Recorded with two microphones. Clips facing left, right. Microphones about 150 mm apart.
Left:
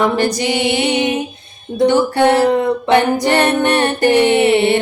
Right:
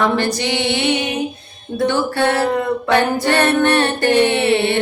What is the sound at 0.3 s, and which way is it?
Music, 15° left (ahead or behind).